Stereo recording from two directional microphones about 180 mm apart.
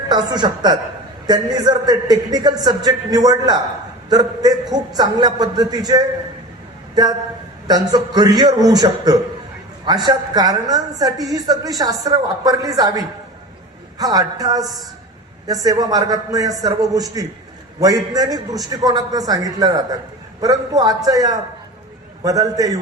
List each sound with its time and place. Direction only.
0.1 s a woman's voice: 25° right (ahead or behind)
14.0 s a woman's voice: 20° right (ahead or behind)